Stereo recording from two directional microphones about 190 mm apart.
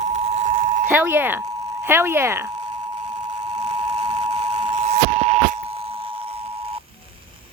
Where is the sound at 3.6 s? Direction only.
35° right (ahead or behind).